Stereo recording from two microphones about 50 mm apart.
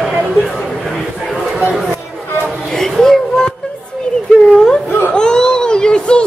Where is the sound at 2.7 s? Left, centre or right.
Centre.